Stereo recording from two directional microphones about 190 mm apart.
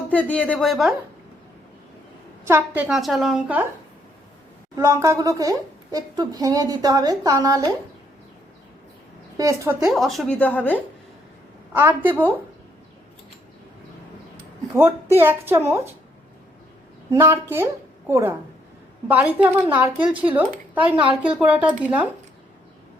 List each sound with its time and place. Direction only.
0.1 s speech: 5° left (ahead or behind)
2.4 s a woman's voice: 15° right (ahead or behind)
4.8 s speech: 15° right (ahead or behind)
9.4 s speech: 15° right (ahead or behind)
9.8 s a woman's voice: centre (ahead or behind)
11.7 s speech: 10° right (ahead or behind)
14.3 s speech: 15° right (ahead or behind)
17.1 s speech: 15° right (ahead or behind)